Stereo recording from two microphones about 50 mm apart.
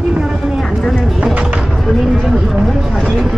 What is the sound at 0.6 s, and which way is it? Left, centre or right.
Vehicle, centre.